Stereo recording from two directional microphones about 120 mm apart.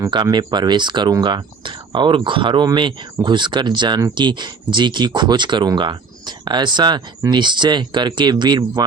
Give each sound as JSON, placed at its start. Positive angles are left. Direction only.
{"t": 0.1, "sound": "speech", "side_deg": -40}